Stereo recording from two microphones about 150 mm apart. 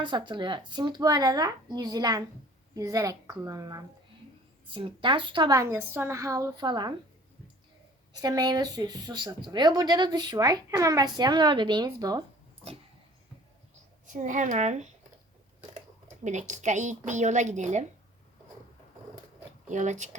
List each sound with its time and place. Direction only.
0.0 s speech: 30° right (ahead or behind)
4.7 s speech: 35° right (ahead or behind)
8.1 s speech: 25° right (ahead or behind)
14.1 s speech: 55° right (ahead or behind)
16.2 s a woman's voice: 50° right (ahead or behind)
19.6 s speech: 55° right (ahead or behind)